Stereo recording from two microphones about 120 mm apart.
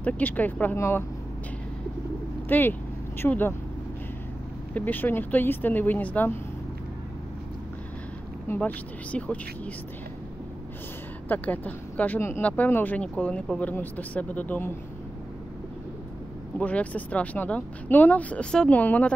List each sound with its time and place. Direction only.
0.0 s speech: 15° left (ahead or behind)
2.4 s speech: 15° left (ahead or behind)
4.7 s speech: 15° left (ahead or behind)
8.5 s speech: 15° left (ahead or behind)
11.2 s speech: 15° left (ahead or behind)
16.5 s speech: 10° left (ahead or behind)